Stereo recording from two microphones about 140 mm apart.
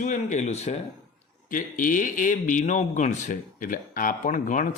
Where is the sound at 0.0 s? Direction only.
60° left (ahead or behind).